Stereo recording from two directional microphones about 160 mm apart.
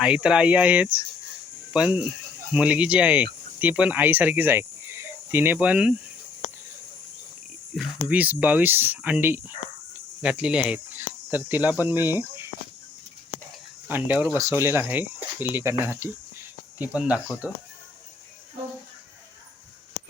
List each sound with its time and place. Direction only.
0.0 s speech: 5° right (ahead or behind)
8.0 s speech: 10° right (ahead or behind)
13.8 s speech: 10° right (ahead or behind)